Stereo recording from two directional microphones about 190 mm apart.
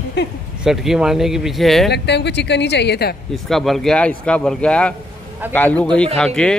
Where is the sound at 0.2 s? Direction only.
65° left (ahead or behind).